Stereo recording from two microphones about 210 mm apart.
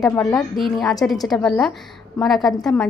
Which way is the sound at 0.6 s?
Centre (ahead or behind).